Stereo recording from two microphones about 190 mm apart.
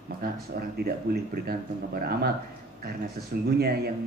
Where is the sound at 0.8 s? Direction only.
50° right (ahead or behind).